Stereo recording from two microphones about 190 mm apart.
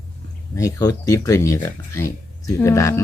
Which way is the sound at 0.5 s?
20° left (ahead or behind).